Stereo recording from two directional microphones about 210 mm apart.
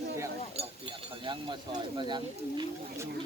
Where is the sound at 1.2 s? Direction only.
20° right (ahead or behind).